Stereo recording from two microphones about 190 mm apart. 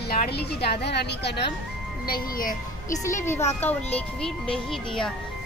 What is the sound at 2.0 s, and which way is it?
Speech, 50° left (ahead or behind).